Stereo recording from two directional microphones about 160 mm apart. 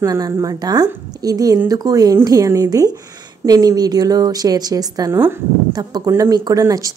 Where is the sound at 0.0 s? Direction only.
20° right (ahead or behind).